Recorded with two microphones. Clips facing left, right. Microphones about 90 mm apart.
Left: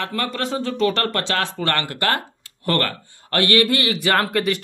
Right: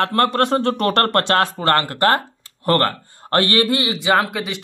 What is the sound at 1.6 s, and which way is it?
Speech, 40° right (ahead or behind).